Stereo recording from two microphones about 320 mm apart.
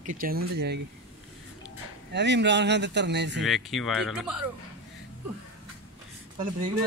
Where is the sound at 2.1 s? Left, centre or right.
Right.